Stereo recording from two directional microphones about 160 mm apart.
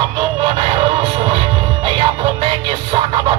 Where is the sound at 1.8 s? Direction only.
30° right (ahead or behind).